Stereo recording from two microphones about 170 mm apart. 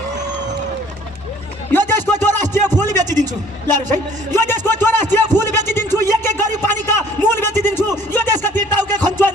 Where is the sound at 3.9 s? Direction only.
15° left (ahead or behind).